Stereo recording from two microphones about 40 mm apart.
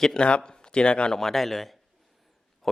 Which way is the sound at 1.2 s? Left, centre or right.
Centre.